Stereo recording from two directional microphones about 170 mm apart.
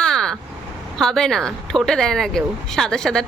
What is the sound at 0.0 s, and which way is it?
Vehicle, 5° left (ahead or behind).